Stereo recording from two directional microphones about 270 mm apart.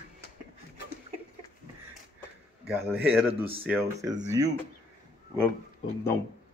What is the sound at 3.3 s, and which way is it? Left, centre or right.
Speech, right.